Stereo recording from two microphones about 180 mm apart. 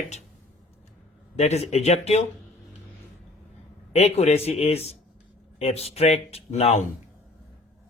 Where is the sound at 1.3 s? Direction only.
35° left (ahead or behind).